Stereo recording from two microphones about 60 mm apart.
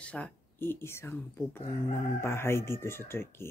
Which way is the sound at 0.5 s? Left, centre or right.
Left.